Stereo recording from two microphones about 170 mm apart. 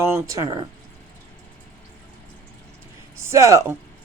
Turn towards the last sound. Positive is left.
turn(degrees=-20)  # may be behind; listen again after turning